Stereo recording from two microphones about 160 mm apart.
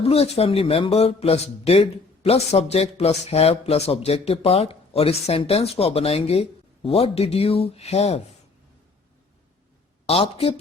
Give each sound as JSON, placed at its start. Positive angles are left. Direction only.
{"t": 0.0, "sound": "speech", "side_deg": 40}
{"t": 10.1, "sound": "speech", "side_deg": 40}